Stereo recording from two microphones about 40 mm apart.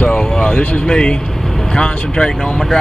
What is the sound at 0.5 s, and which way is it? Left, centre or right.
Speech, left.